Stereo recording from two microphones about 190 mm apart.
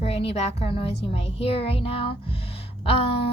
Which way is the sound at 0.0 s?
30° left (ahead or behind).